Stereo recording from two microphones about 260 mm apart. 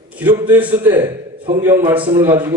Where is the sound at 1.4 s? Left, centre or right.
Centre.